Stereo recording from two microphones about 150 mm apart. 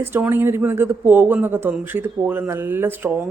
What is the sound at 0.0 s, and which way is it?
Speech, 15° right (ahead or behind).